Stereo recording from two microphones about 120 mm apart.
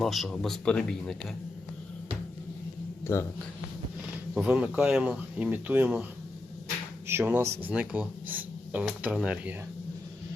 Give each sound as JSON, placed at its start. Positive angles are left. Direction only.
{"t": 0.0, "sound": "speech", "side_deg": 0}
{"t": 3.1, "sound": "speech", "side_deg": 20}
{"t": 4.4, "sound": "speech", "side_deg": -10}
{"t": 7.1, "sound": "speech", "side_deg": -20}